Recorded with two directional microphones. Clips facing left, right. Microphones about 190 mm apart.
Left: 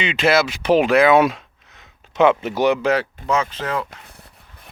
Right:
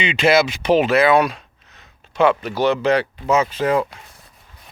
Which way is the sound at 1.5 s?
15° left (ahead or behind).